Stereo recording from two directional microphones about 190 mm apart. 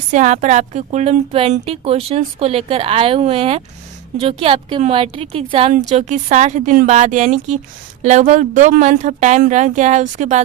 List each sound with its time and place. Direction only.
0.1 s a woman's voice: 40° right (ahead or behind)